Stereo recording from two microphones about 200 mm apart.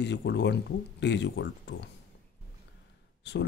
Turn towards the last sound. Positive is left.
turn(degrees=60)  # may be behind; listen again after turning